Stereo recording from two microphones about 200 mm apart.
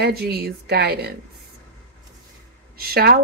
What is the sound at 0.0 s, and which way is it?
Speech, 50° right (ahead or behind).